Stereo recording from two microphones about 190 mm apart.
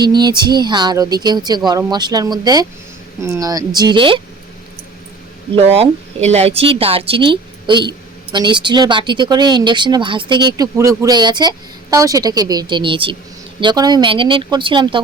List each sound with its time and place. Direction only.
0.0 s speech: 25° right (ahead or behind)
5.5 s a woman's voice: 30° right (ahead or behind)